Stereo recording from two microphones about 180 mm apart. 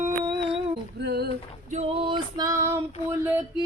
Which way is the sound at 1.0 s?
65° right (ahead or behind).